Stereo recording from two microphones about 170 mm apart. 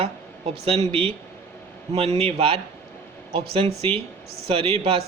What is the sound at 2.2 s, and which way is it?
Speech, 35° right (ahead or behind).